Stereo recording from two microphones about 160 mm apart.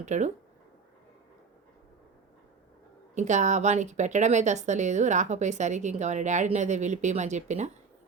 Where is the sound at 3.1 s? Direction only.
45° right (ahead or behind).